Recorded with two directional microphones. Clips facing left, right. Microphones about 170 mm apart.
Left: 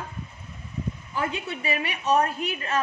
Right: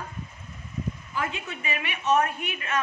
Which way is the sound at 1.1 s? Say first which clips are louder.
Left 5 dB; 35° left (ahead or behind).